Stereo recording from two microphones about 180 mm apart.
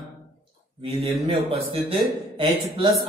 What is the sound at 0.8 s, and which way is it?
Speech, 30° right (ahead or behind).